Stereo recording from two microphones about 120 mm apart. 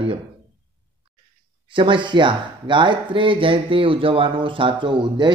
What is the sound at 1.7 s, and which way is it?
Speech, 45° right (ahead or behind).